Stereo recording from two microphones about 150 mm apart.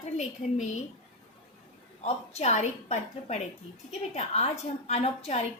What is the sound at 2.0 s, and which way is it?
A woman's voice, 50° left (ahead or behind).